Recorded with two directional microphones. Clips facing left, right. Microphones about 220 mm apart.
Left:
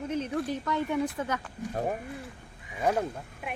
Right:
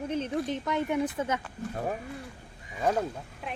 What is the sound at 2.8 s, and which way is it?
Speech, 10° left (ahead or behind).